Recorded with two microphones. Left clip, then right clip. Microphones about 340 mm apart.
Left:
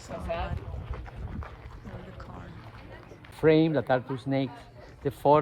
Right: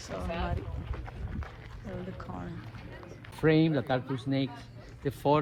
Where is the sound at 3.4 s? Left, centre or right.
Left.